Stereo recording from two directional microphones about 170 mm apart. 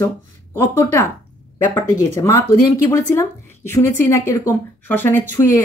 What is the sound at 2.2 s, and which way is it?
Speech, 15° left (ahead or behind).